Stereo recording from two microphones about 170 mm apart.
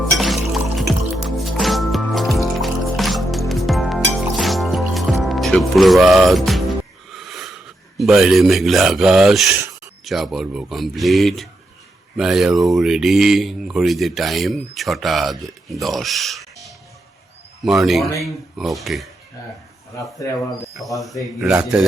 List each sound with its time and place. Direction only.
0.2 s music: centre (ahead or behind)
7.1 s wheeze: centre (ahead or behind)
7.9 s speech: centre (ahead or behind)
20.1 s speech: 20° left (ahead or behind)
20.7 s speech: centre (ahead or behind)